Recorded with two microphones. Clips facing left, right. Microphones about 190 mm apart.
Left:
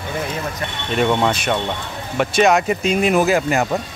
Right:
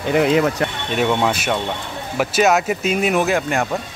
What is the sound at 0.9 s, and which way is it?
Speech, 5° right (ahead or behind).